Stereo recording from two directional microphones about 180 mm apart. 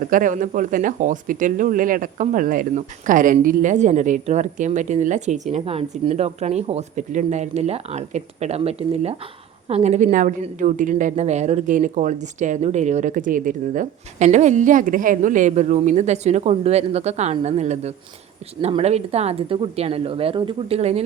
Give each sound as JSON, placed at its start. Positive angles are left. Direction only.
{"t": 0.1, "sound": "a woman's voice", "side_deg": -45}